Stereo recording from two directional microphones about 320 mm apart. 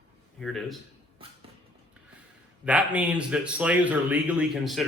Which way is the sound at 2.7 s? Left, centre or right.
Centre.